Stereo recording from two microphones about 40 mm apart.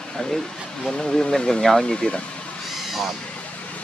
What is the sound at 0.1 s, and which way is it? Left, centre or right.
Speech, centre.